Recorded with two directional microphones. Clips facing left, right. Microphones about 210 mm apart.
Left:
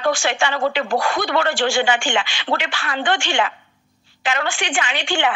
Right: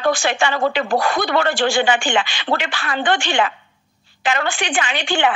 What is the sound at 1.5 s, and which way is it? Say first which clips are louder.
Speech: right 1 dB; 35° right (ahead or behind).